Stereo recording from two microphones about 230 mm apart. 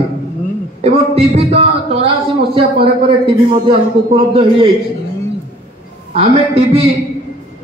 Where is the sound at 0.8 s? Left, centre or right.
Right.